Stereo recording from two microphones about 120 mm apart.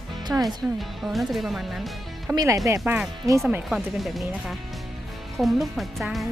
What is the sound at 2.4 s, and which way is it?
Speech, 30° right (ahead or behind).